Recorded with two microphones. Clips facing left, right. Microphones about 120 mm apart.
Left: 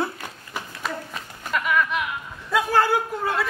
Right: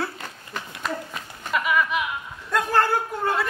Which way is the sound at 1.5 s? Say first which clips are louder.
Even; 5° right (ahead or behind).